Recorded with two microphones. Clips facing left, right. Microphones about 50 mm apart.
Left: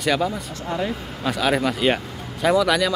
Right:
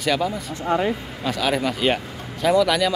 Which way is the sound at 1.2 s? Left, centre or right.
Centre.